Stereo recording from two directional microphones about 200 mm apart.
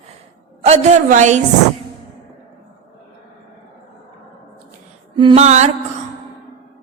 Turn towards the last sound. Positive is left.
turn(degrees=-35)  # may be behind; listen again after turning